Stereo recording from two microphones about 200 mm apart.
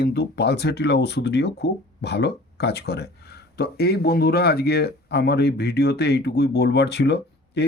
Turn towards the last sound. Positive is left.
turn(degrees=55)  # may be behind; listen again after turning